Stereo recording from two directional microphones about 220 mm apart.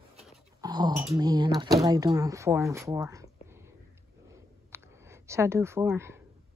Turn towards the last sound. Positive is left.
turn(degrees=-10)  # may be behind; listen again after turning